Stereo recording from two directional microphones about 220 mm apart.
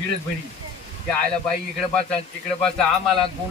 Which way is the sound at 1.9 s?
5° left (ahead or behind).